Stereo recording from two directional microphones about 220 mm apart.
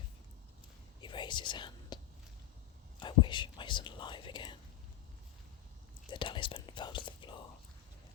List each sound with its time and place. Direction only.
1.0 s whispering: 20° left (ahead or behind)
3.0 s whispering: 20° left (ahead or behind)
6.1 s whispering: 20° left (ahead or behind)